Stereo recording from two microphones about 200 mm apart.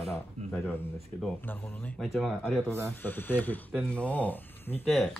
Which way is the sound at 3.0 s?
10° left (ahead or behind).